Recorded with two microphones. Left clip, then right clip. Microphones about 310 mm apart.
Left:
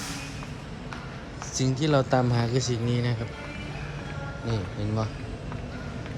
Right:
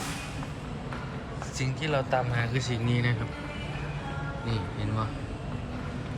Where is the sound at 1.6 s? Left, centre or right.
Centre.